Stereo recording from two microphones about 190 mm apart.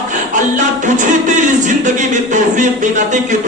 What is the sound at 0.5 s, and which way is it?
Speech, 40° right (ahead or behind).